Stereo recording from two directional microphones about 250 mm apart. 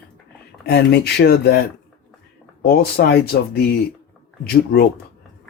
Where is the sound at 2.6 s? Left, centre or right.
Left.